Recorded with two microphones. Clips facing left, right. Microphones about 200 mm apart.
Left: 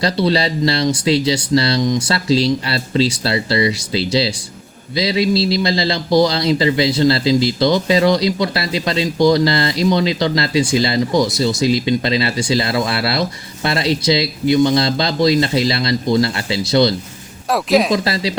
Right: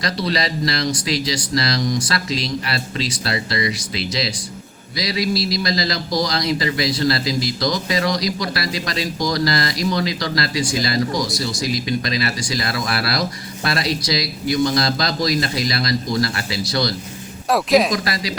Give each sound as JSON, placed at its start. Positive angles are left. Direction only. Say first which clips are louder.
{"t": 0.3, "sound": "speech", "louder": "left 5 dB", "side_deg": 30}
{"t": 17.5, "sound": "speech", "louder": "left 1 dB", "side_deg": 0}
{"t": 17.9, "sound": "speech", "louder": "left 5 dB", "side_deg": 25}